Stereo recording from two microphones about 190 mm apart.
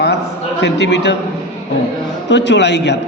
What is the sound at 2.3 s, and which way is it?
Speech, 65° left (ahead or behind).